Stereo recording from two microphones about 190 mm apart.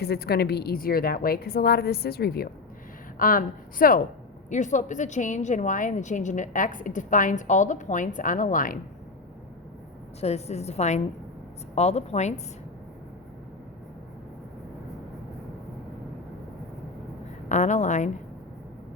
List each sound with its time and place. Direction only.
0.0 s a woman's voice: 55° left (ahead or behind)
10.2 s a woman's voice: 35° left (ahead or behind)
17.5 s a woman's voice: 40° left (ahead or behind)